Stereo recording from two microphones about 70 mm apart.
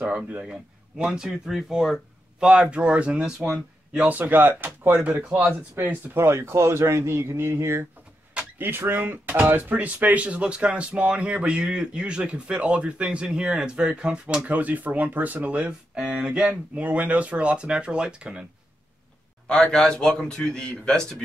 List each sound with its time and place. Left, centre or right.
0.0 s speech: centre
2.4 s speech: centre
4.1 s speech: right
19.4 s a man's voice: centre